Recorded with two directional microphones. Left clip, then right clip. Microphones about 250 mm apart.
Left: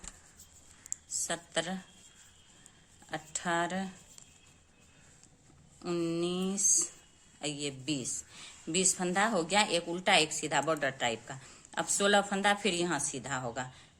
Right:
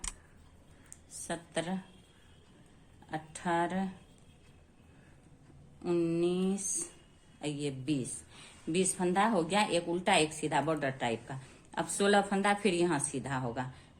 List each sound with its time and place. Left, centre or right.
0.9 s a sound: left
3.1 s speech: left
5.8 s a woman's voice: left